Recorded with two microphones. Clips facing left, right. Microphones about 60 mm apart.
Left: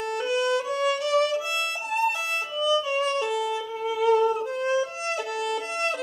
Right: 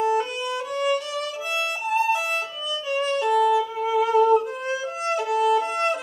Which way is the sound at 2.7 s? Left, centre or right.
Centre.